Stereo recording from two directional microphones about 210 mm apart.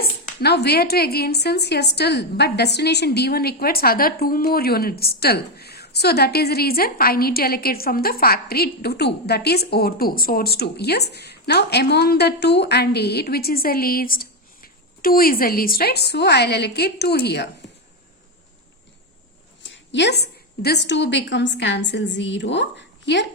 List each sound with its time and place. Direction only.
0.4 s a woman's voice: 50° left (ahead or behind)
19.6 s a woman's voice: 55° left (ahead or behind)